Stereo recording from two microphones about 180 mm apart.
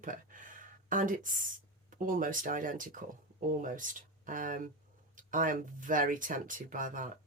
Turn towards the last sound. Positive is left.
turn(degrees=-45)  # may be behind; listen again after turning